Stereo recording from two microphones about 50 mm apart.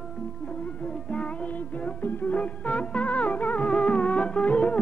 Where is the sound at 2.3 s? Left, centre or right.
Left.